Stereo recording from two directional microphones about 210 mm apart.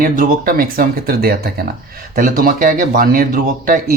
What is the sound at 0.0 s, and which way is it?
Speech, 40° right (ahead or behind).